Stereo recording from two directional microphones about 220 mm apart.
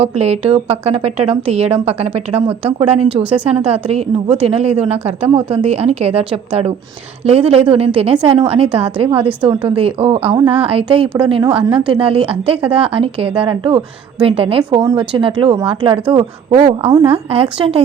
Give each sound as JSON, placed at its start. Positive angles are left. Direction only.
{"t": 0.0, "sound": "speech", "side_deg": -25}
{"t": 3.2, "sound": "a woman's voice", "side_deg": -5}
{"t": 4.4, "sound": "speech", "side_deg": -25}